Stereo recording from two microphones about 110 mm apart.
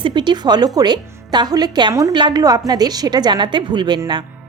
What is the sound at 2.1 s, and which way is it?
A woman's voice, 40° right (ahead or behind).